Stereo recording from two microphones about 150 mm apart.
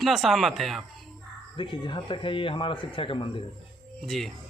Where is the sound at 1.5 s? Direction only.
35° left (ahead or behind).